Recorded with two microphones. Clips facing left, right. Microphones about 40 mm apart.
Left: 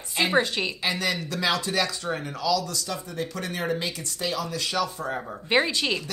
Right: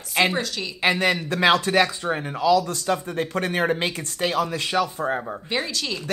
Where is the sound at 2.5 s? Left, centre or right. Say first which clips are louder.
Right 7 dB; right.